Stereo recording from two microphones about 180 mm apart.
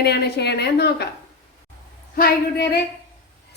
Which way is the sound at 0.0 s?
65° left (ahead or behind).